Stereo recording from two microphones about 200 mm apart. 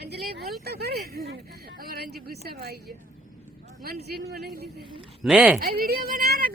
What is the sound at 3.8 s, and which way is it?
Speech, 50° right (ahead or behind).